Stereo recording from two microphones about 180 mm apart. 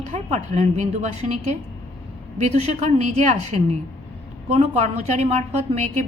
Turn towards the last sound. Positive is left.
turn(degrees=-40)  # may be behind; listen again after turning